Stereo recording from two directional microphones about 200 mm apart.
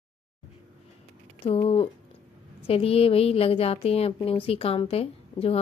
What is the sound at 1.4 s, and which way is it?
A woman's voice, 30° left (ahead or behind).